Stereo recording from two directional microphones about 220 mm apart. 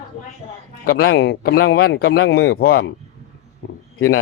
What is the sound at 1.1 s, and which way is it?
A man's voice, 50° left (ahead or behind).